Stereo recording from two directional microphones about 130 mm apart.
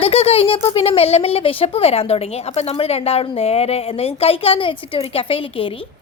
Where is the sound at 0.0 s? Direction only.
50° left (ahead or behind).